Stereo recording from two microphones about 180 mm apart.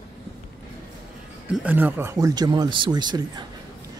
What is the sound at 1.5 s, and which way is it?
Speech, 10° right (ahead or behind).